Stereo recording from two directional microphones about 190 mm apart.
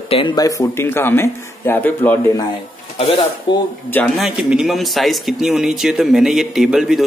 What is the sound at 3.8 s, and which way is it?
A man's voice, 10° left (ahead or behind).